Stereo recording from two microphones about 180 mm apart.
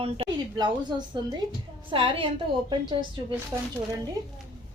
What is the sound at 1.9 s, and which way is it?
Speech, 30° right (ahead or behind).